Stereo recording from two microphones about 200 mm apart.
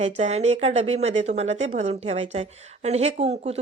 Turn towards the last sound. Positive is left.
turn(degrees=-30)  # may be behind; listen again after turning